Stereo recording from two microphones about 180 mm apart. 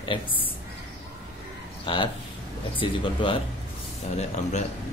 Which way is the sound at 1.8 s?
30° left (ahead or behind).